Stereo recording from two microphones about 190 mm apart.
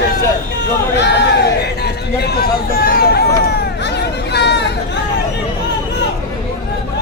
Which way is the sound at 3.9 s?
65° left (ahead or behind).